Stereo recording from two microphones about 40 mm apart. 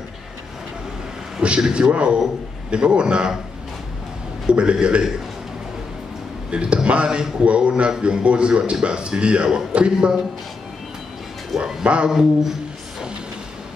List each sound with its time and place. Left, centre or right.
1.6 s a man's voice: right
4.5 s a man's voice: right
6.5 s a man's voice: right
9.9 s speech: centre
11.6 s a man's voice: right
12.1 s speech: centre